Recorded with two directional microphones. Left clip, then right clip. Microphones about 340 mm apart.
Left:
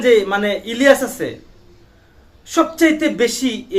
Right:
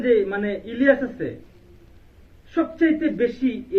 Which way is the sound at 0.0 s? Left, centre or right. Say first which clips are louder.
Left 6 dB; left.